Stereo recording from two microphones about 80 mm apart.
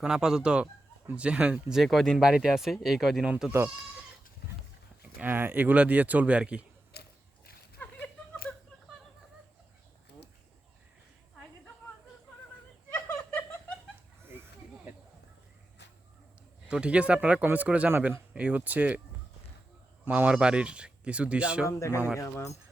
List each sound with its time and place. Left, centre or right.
0.0 s speech: centre
1.8 s speech: centre
5.2 s speech: right
7.8 s a sound: centre
12.9 s snicker: left
16.6 s speech: centre
20.1 s speech: centre
21.7 s speech: left